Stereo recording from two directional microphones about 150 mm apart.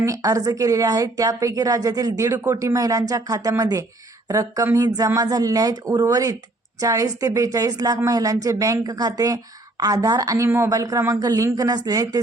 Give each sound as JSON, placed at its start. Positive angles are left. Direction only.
{"t": 0.0, "sound": "a woman's voice", "side_deg": -20}